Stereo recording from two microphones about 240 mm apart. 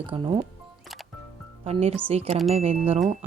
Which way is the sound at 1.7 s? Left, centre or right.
Right.